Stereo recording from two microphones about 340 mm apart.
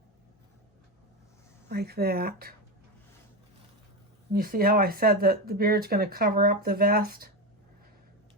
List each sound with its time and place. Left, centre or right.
1.7 s speech: right
4.3 s speech: right